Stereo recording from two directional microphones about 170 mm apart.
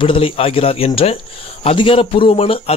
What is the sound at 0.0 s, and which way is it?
Speech, 30° left (ahead or behind).